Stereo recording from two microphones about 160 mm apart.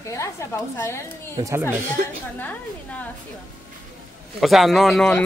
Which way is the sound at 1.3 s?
20° right (ahead or behind).